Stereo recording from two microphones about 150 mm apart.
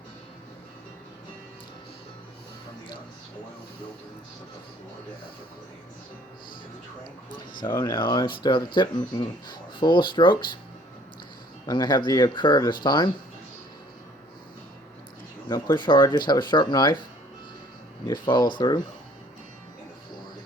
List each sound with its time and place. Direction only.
7.8 s speech: 30° left (ahead or behind)
11.6 s speech: 30° left (ahead or behind)
15.4 s speech: 25° left (ahead or behind)
18.1 s speech: 30° left (ahead or behind)